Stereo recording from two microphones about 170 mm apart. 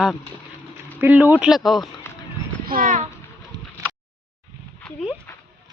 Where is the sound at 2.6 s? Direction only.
55° right (ahead or behind).